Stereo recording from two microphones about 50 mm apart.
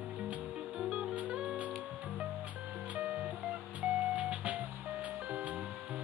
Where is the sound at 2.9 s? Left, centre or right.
Right.